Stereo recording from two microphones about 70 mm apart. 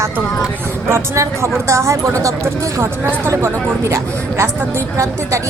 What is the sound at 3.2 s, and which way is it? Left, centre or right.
A woman's voice, right.